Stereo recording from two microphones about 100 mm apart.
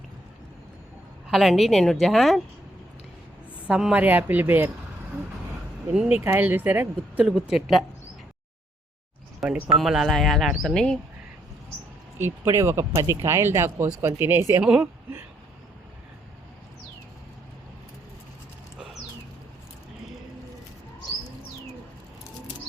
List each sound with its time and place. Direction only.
1.3 s speech: centre (ahead or behind)
3.7 s speech: 10° right (ahead or behind)
6.1 s speech: 20° right (ahead or behind)
7.3 s speech: 5° right (ahead or behind)
9.4 s speech: 5° right (ahead or behind)
12.2 s speech: 30° right (ahead or behind)
14.6 s speech: 10° right (ahead or behind)